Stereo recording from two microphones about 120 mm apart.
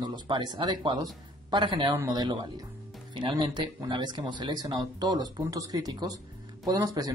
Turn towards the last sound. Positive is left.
turn(degrees=-35)  # may be behind; listen again after turning